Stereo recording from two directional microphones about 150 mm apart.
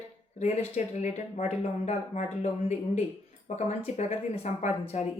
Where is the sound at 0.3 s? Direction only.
50° left (ahead or behind).